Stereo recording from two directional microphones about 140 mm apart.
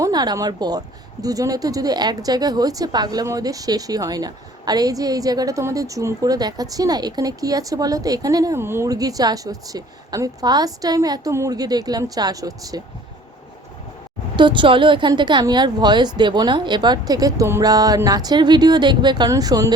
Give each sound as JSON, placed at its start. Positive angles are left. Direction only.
{"t": 0.0, "sound": "a woman's voice", "side_deg": -30}
{"t": 14.3, "sound": "a woman's voice", "side_deg": -35}